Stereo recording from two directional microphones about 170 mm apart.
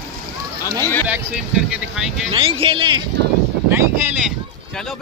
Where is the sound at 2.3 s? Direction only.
30° right (ahead or behind).